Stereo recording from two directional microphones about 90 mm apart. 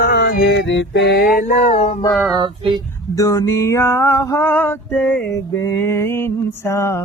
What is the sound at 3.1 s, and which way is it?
Music, 35° left (ahead or behind).